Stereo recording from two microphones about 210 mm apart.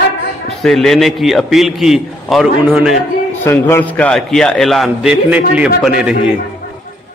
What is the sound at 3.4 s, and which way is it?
A man's voice, 10° left (ahead or behind).